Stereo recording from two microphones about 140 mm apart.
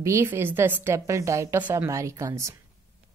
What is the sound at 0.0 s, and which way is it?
A woman's voice, 20° right (ahead or behind).